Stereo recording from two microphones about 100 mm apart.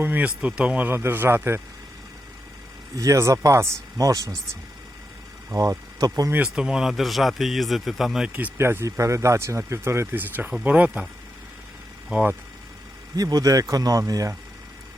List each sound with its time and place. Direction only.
0.0 s speech: 20° right (ahead or behind)
2.9 s speech: 35° right (ahead or behind)
5.5 s speech: 35° right (ahead or behind)
6.3 s speech: 10° right (ahead or behind)
8.5 s speech: 25° right (ahead or behind)
10.5 s speech: 15° right (ahead or behind)
12.1 s speech: 15° right (ahead or behind)
13.1 s speech: 40° right (ahead or behind)